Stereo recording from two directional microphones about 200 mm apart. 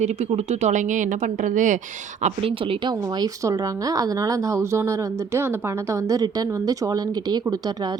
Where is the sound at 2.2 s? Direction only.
30° right (ahead or behind).